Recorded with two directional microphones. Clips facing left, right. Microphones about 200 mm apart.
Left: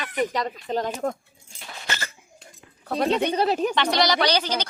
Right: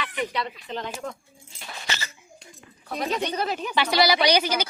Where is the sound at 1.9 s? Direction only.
50° left (ahead or behind).